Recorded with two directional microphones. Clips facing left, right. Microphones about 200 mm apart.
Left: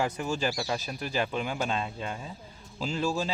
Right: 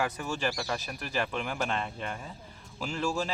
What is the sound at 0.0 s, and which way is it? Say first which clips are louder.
Speech: left 2 dB; 25° left (ahead or behind).